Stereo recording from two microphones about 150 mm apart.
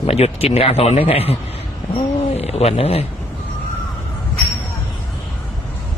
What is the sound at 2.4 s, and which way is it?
Speech, 45° left (ahead or behind).